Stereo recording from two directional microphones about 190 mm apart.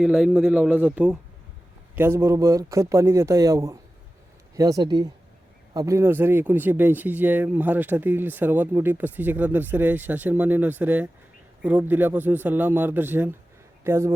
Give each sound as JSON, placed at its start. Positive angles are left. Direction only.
{"t": 0.0, "sound": "a man's voice", "side_deg": -5}